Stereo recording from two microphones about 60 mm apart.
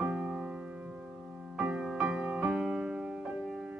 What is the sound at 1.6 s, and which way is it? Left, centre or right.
Music, centre.